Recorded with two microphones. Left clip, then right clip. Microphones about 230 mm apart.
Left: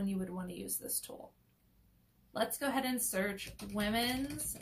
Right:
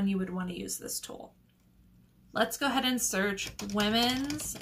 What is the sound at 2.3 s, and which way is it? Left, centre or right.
Speech, centre.